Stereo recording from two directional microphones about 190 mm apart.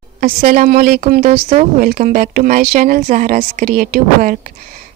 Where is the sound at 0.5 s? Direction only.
50° right (ahead or behind).